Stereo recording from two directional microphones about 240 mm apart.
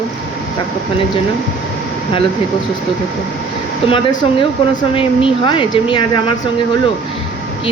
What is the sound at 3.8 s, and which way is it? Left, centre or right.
Speech, centre.